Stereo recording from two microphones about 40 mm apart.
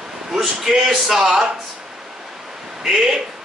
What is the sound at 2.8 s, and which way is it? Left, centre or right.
Speech, centre.